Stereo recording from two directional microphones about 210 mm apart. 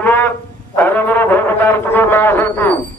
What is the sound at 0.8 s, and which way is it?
Speech, 10° left (ahead or behind).